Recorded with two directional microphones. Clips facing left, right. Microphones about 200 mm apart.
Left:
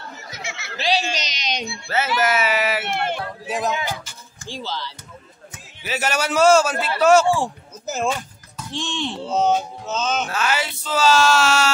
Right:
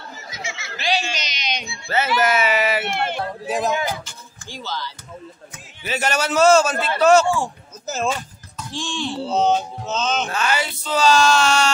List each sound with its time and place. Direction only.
0.4 s chatter: 65° left (ahead or behind)
0.7 s a sound: 35° left (ahead or behind)
1.9 s music: 5° left (ahead or behind)
4.5 s speech: 30° left (ahead or behind)
5.9 s a man's voice: 5° left (ahead or behind)
7.8 s a sound: 15° left (ahead or behind)
8.7 s speech: 20° left (ahead or behind)
9.3 s music: 10° left (ahead or behind)